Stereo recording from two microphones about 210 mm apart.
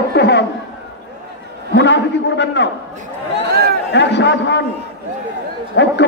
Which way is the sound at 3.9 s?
55° left (ahead or behind).